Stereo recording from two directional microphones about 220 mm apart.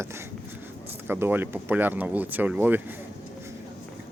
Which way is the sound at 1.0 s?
10° right (ahead or behind).